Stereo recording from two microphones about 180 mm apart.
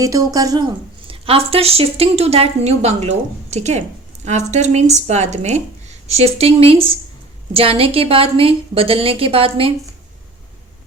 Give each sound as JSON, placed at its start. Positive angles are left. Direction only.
{"t": 0.0, "sound": "a woman's voice", "side_deg": -20}